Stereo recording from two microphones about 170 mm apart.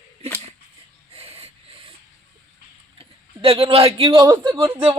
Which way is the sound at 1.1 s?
35° right (ahead or behind).